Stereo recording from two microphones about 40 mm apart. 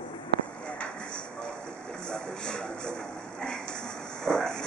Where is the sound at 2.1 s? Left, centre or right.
Centre.